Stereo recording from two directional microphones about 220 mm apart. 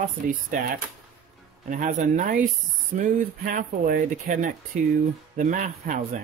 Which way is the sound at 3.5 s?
35° right (ahead or behind).